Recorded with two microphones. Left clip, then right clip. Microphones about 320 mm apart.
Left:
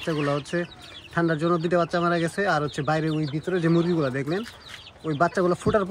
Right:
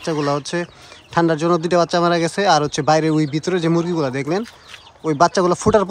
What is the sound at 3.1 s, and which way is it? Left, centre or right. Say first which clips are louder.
Speech: right 9 dB; right.